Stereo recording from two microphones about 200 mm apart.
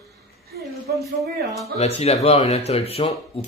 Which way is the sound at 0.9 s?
50° right (ahead or behind).